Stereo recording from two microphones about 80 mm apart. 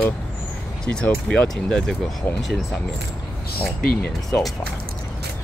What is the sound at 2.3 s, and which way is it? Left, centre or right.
Speech, left.